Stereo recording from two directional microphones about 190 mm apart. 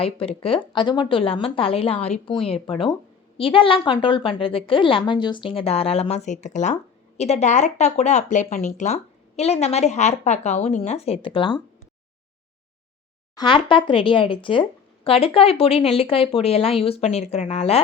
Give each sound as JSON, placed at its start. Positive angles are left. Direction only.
{"t": 0.0, "sound": "speech", "side_deg": 30}
{"t": 13.3, "sound": "speech", "side_deg": 25}